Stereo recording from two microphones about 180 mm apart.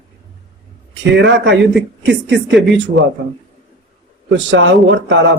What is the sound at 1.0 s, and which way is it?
Speech, 80° right.